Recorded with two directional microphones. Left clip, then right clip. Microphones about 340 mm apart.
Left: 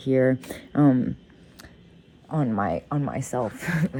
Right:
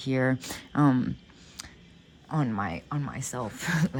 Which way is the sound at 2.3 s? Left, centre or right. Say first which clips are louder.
Left 5 dB; centre.